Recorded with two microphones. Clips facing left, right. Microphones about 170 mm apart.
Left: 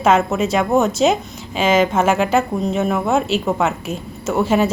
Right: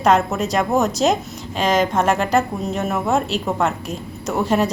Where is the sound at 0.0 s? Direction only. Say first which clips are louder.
Left 1 dB; centre (ahead or behind).